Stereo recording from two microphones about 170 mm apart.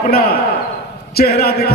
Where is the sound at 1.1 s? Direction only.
65° left (ahead or behind).